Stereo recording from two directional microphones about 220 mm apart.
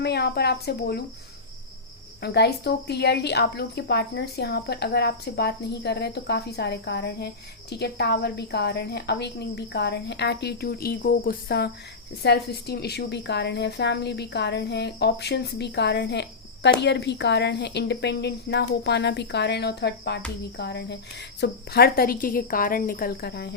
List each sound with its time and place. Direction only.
0.0 s a woman's voice: 50° left (ahead or behind)
2.2 s a woman's voice: 50° left (ahead or behind)